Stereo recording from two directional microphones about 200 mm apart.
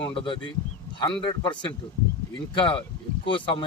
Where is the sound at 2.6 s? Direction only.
25° left (ahead or behind).